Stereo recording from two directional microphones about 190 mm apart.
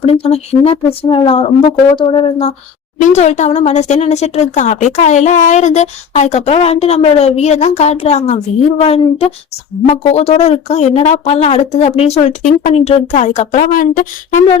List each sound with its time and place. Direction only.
0.0 s speech: 30° left (ahead or behind)